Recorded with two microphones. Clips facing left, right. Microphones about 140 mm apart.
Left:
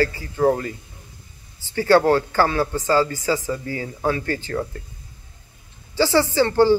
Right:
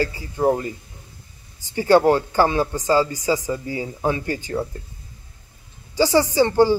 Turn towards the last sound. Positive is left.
turn(degrees=-15)  # may be behind; listen again after turning